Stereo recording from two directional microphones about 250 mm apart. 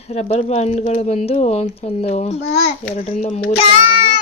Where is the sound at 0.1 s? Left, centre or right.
Left.